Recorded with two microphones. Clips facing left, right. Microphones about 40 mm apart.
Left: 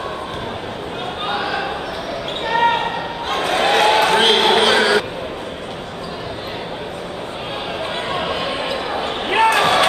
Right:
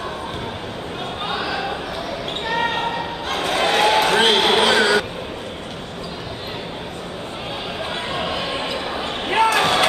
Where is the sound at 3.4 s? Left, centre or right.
Centre.